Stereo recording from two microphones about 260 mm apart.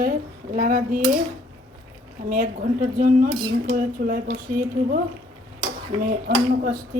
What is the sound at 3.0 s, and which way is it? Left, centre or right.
A woman's voice, right.